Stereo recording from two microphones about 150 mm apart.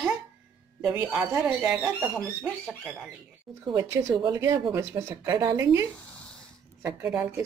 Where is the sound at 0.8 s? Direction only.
10° right (ahead or behind).